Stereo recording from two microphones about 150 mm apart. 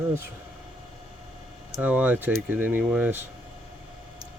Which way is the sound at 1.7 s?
10° right (ahead or behind).